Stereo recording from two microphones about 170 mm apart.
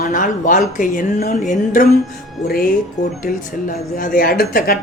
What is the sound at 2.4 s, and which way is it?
Speech, 60° left (ahead or behind).